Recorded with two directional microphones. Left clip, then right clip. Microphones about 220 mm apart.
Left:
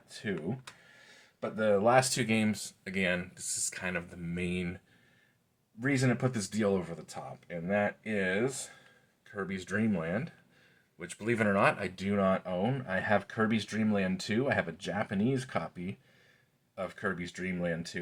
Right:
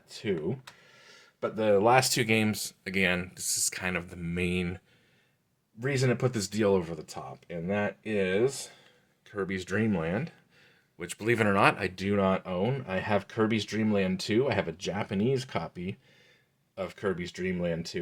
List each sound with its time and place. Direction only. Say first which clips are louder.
0.1 s a sound: right 5 dB; 45° right (ahead or behind)
1.4 s speech: right 4 dB; 50° right (ahead or behind)
5.8 s speech: right 2 dB; 50° right (ahead or behind)
9.2 s speech: right 5 dB; 50° right (ahead or behind)